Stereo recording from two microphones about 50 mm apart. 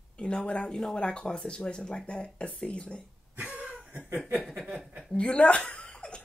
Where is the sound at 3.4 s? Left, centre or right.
Right.